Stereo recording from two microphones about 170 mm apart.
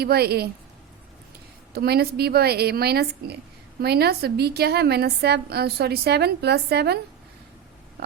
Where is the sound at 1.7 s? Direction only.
70° right (ahead or behind).